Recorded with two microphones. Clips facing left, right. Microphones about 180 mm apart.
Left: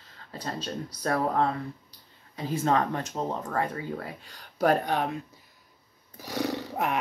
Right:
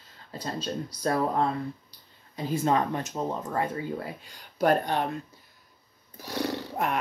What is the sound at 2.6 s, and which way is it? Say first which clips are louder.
Speech: even; 15° right (ahead or behind).